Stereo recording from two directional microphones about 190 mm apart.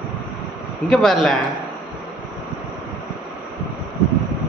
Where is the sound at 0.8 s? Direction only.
Centre (ahead or behind).